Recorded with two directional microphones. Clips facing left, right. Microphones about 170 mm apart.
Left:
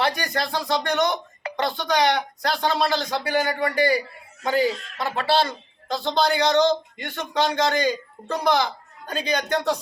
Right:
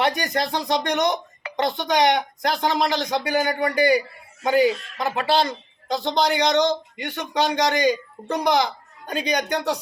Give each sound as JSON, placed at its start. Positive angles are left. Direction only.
{"t": 0.0, "sound": "a man's voice", "side_deg": -20}